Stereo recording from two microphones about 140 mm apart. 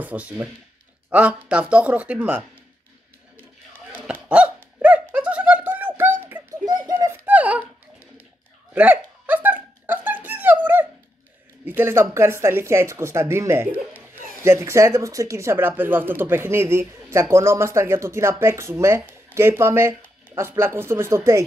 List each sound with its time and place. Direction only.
0.0 s speech: 10° right (ahead or behind)
3.9 s honk: 10° right (ahead or behind)
4.7 s a sound: 10° right (ahead or behind)
6.6 s bird: 25° right (ahead or behind); by 7.6 s 10° right (ahead or behind)
8.7 s a sound: 10° right (ahead or behind)
11.6 s speech: 15° right (ahead or behind)